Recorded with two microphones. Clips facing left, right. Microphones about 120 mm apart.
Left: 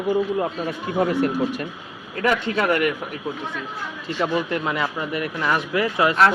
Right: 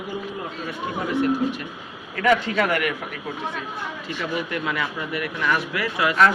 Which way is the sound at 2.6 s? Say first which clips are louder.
Left 2 dB; 25° left (ahead or behind).